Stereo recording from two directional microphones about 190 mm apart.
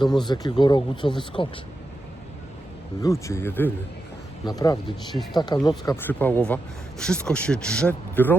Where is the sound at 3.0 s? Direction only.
15° left (ahead or behind).